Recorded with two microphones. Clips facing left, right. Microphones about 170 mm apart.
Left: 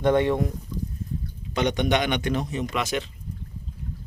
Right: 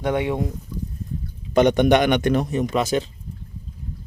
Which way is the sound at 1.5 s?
50° right (ahead or behind).